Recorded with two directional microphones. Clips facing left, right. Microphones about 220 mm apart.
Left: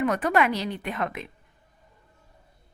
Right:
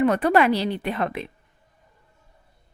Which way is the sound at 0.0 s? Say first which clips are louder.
Right 5 dB; 30° right (ahead or behind).